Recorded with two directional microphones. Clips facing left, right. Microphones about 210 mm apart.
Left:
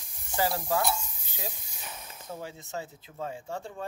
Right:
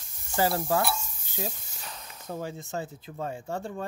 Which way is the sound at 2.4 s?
50° right (ahead or behind).